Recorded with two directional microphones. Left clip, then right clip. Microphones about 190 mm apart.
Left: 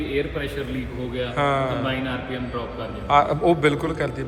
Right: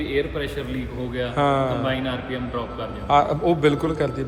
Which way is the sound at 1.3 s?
25° right (ahead or behind).